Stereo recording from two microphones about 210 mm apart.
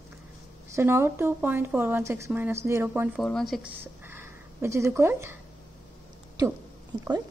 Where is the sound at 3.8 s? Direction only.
10° right (ahead or behind).